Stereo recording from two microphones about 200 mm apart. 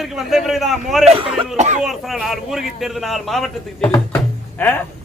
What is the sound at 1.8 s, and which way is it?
A man's voice, centre (ahead or behind).